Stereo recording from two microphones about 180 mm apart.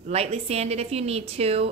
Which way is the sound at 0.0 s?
35° right (ahead or behind).